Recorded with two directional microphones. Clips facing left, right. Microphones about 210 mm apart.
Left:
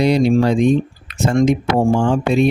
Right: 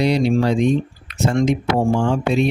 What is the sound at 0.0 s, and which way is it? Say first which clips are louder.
Speech: left 3 dB; 50° left (ahead or behind).